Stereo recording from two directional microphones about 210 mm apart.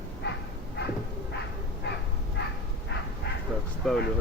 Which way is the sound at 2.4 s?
50° left (ahead or behind).